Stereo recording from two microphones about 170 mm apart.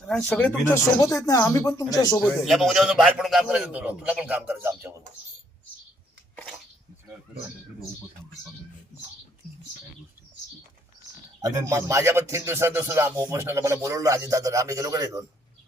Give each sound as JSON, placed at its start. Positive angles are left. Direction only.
{"t": 0.1, "sound": "speech", "side_deg": 10}
{"t": 2.4, "sound": "a man's voice", "side_deg": 0}
{"t": 11.4, "sound": "speech", "side_deg": -20}